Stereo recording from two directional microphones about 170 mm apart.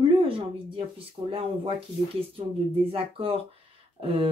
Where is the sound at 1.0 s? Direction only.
35° right (ahead or behind).